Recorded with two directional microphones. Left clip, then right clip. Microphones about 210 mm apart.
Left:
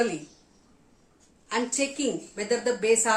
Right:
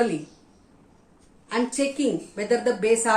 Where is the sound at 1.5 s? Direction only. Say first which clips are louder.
Right 3 dB; 10° left (ahead or behind).